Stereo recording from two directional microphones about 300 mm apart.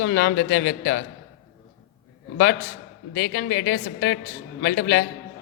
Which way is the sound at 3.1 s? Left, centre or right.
Left.